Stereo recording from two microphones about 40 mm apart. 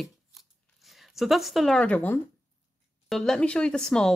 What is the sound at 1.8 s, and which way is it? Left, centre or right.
Speech, left.